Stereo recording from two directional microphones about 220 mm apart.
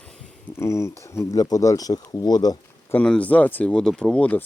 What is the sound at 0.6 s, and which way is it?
Speech, 15° left (ahead or behind).